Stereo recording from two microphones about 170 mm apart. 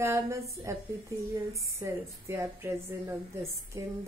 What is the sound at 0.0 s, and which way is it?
A woman's voice, 15° right (ahead or behind).